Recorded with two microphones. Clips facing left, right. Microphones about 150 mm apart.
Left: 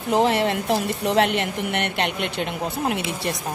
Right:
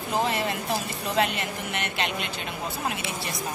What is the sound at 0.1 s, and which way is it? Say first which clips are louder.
A woman's voice: left 7 dB; 70° left (ahead or behind).